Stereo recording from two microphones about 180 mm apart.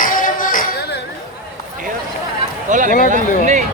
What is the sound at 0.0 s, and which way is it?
Music, 50° left (ahead or behind).